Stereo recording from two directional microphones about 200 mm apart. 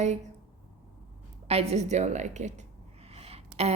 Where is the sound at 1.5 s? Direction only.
30° right (ahead or behind).